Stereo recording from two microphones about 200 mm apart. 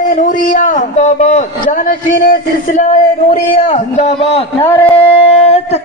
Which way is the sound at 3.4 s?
30° left (ahead or behind).